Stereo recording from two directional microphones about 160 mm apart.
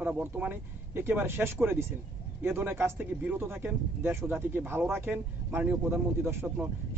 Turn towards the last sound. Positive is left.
turn(degrees=-15)  # may be behind; listen again after turning